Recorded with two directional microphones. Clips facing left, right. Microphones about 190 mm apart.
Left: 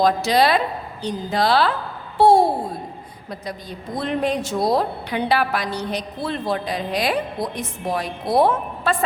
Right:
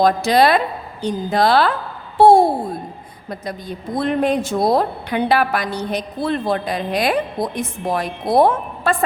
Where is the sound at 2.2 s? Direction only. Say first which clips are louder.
Right 3 dB; 50° right (ahead or behind).